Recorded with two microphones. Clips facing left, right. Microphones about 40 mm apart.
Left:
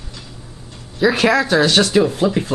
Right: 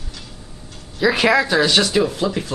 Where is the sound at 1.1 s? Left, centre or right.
Centre.